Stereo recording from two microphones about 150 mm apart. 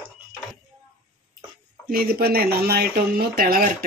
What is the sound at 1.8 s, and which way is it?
Speech, 85° right.